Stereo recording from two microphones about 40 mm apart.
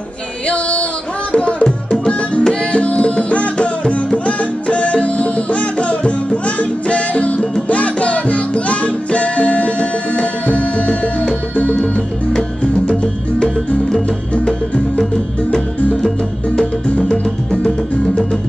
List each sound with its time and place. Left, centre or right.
0.5 s a sound: left
1.6 s music: centre
2.3 s music: left
12.8 s music: left
16.5 s music: left